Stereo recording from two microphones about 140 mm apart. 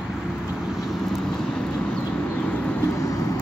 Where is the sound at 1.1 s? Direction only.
5° left (ahead or behind).